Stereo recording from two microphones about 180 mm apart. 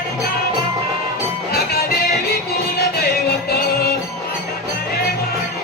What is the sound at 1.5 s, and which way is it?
Music, 60° left (ahead or behind).